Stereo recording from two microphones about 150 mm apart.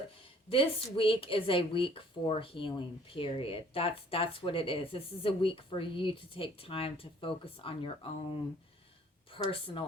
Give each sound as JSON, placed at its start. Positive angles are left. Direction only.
{"t": 0.5, "sound": "a woman's voice", "side_deg": 35}
{"t": 9.3, "sound": "a woman's voice", "side_deg": 35}